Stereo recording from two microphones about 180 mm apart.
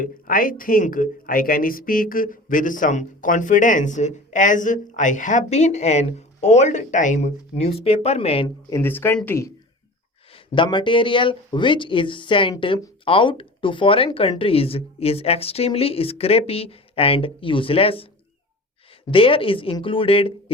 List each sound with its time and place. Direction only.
0.0 s speech: 50° left (ahead or behind); by 8.4 s 35° left (ahead or behind)
8.7 s speech: 10° left (ahead or behind)
10.3 s speech: 30° left (ahead or behind)
19.1 s speech: 30° left (ahead or behind)